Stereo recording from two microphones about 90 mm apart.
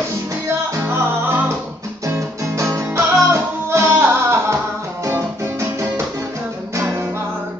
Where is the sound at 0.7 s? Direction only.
30° right (ahead or behind).